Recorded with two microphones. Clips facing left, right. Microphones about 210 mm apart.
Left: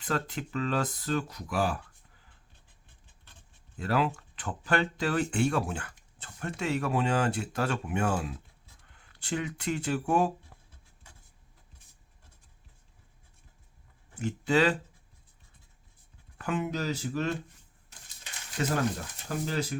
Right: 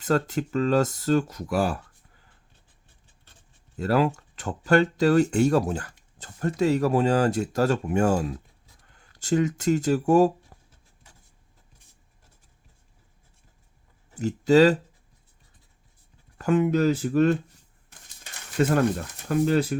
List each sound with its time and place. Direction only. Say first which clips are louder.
0.0 s speech: right 8 dB; 45° right (ahead or behind)
3.8 s speech: right 6 dB; 45° right (ahead or behind)
14.2 s speech: right 9 dB; 40° right (ahead or behind)
16.4 s speech: right 10 dB; 50° right (ahead or behind)
17.8 s crumpling: right 2 dB; 55° right (ahead or behind)
19.3 s speech: right 10 dB; 60° right (ahead or behind)